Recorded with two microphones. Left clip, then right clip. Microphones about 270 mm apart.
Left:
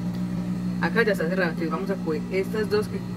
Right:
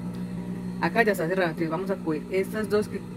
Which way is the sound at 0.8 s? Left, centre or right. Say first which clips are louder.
Even; right.